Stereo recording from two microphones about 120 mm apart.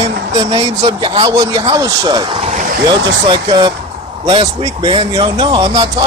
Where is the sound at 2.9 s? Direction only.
40° right (ahead or behind).